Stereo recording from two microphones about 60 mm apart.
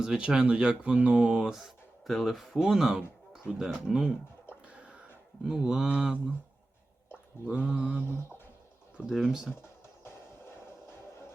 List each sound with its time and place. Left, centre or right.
0.0 s speech: centre
1.5 s speech: centre
4.6 s a sound: centre
5.5 s speech: centre
7.7 s speech: centre
9.6 s music: left